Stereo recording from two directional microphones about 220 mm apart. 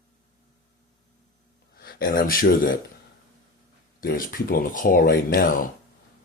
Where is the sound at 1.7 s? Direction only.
45° left (ahead or behind).